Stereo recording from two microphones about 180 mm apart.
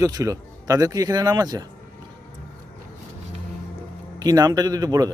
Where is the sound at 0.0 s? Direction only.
20° right (ahead or behind).